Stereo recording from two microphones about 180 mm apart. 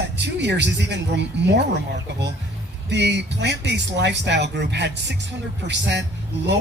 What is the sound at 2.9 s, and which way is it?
Speech, 75° right (ahead or behind).